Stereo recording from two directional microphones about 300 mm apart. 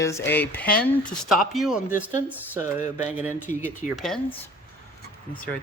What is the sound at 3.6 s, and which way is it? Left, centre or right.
Speech, centre.